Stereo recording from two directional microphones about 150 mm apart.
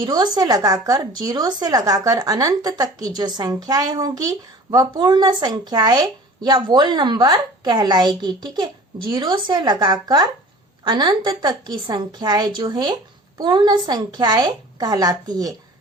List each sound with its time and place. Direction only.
0.1 s a woman's voice: 25° right (ahead or behind)